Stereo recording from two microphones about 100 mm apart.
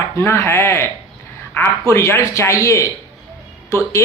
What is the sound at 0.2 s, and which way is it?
Speech, 25° left (ahead or behind).